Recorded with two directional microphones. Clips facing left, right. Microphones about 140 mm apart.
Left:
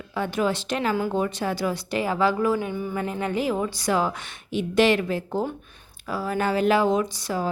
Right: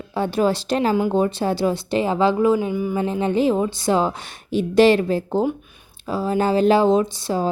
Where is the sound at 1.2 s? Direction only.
30° right (ahead or behind).